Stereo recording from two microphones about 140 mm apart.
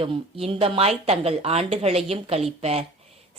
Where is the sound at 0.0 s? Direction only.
40° right (ahead or behind).